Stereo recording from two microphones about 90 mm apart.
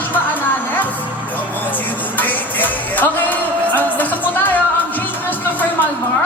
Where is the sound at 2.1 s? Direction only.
20° left (ahead or behind).